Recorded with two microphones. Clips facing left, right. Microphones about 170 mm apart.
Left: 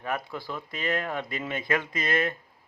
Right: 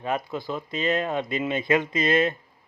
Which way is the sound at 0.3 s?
20° right (ahead or behind).